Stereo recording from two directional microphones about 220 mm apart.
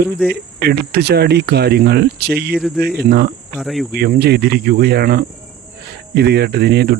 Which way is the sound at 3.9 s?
45° right (ahead or behind).